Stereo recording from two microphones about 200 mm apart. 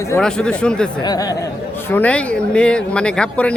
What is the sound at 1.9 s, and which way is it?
Speech, 5° left (ahead or behind).